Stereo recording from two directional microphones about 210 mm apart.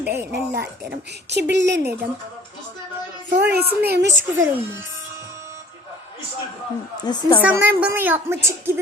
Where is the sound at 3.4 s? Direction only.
50° right (ahead or behind).